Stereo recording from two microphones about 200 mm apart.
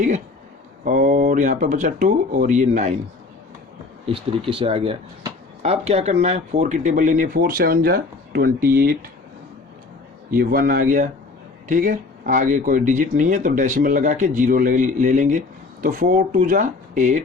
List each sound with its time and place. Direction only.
0.9 s speech: 40° right (ahead or behind)
4.0 s speech: 25° right (ahead or behind); by 9.0 s 45° right (ahead or behind)
10.3 s speech: 45° right (ahead or behind)